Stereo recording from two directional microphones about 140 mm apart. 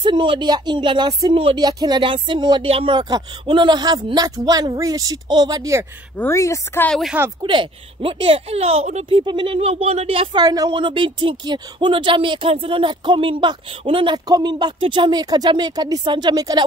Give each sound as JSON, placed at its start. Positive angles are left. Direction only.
{"t": 0.0, "sound": "a woman's voice", "side_deg": -35}
{"t": 6.1, "sound": "a woman's voice", "side_deg": 15}
{"t": 6.9, "sound": "speech", "side_deg": 0}
{"t": 7.4, "sound": "a woman's voice", "side_deg": -40}
{"t": 9.2, "sound": "speech", "side_deg": -35}
{"t": 10.4, "sound": "a woman's voice", "side_deg": -25}